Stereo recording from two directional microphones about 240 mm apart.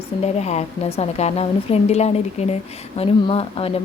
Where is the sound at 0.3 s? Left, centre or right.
Left.